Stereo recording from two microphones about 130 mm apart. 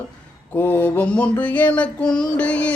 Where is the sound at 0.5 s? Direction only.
15° left (ahead or behind).